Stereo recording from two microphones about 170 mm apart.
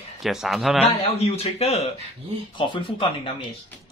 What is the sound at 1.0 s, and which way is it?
Speech, 35° left (ahead or behind).